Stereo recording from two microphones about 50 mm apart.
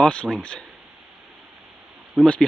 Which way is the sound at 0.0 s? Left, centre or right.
Left.